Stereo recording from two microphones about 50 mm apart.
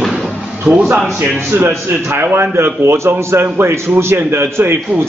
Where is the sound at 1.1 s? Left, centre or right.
Right.